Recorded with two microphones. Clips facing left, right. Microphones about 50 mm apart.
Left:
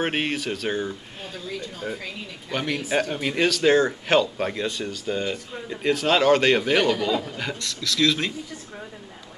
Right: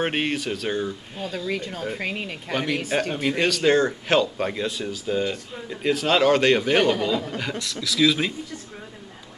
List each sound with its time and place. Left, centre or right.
0.0 s speech: centre
1.5 s speech: right
2.5 s speech: centre